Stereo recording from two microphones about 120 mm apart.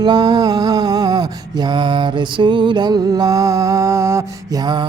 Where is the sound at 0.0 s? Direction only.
35° right (ahead or behind).